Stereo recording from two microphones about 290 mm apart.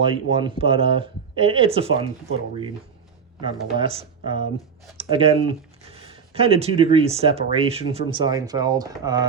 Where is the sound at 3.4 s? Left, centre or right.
Centre.